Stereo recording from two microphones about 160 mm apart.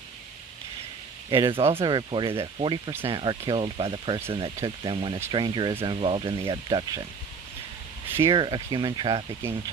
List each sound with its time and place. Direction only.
1.3 s speech: 30° right (ahead or behind)
8.3 s speech: 30° right (ahead or behind)